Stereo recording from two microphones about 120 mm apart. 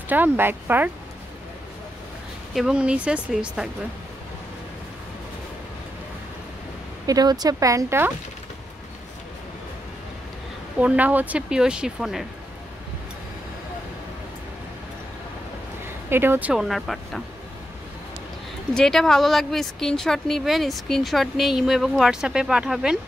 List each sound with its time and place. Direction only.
0.1 s speech: 15° right (ahead or behind)
2.5 s speech: 5° right (ahead or behind)
7.1 s speech: 35° right (ahead or behind)
10.8 s speech: 10° right (ahead or behind)
16.1 s speech: 20° right (ahead or behind)
16.6 s a woman's voice: centre (ahead or behind)
18.8 s a woman's voice: 5° left (ahead or behind)